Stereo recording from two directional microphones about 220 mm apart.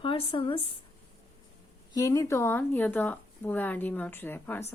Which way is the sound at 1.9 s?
15° left (ahead or behind).